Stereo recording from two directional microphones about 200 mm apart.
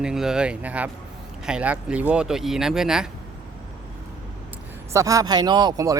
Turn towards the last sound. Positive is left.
turn(degrees=-20)  # may be behind; listen again after turning